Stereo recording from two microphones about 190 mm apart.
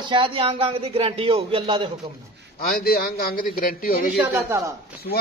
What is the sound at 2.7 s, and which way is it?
A man's voice, 50° left (ahead or behind).